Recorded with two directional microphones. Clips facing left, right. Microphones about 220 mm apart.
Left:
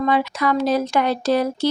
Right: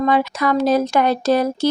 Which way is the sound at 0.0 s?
45° right (ahead or behind).